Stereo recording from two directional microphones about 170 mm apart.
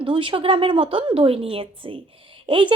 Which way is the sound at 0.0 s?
30° right (ahead or behind).